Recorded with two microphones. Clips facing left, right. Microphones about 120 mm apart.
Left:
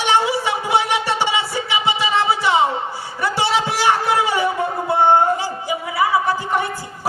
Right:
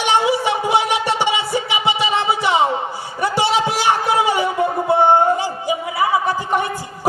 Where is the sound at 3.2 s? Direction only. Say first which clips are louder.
Right 2 dB; 15° right (ahead or behind).